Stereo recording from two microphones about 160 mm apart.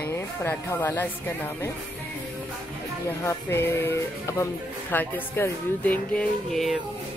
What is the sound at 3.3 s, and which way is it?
Speech, 15° left (ahead or behind).